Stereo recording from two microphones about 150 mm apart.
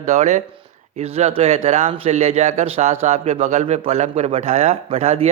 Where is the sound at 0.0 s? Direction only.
50° right (ahead or behind).